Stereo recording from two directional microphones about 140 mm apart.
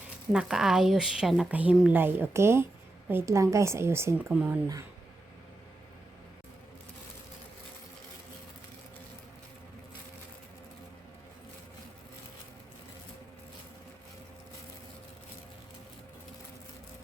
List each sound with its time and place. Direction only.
0.3 s a woman's voice: 5° right (ahead or behind)
4.3 s speech: 5° right (ahead or behind)